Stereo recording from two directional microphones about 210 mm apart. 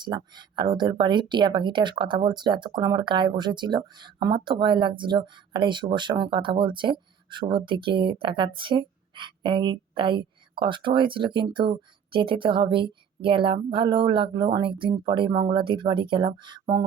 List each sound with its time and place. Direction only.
0.0 s speech: 20° right (ahead or behind)